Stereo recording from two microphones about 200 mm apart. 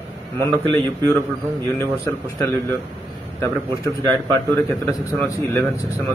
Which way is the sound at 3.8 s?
10° left (ahead or behind).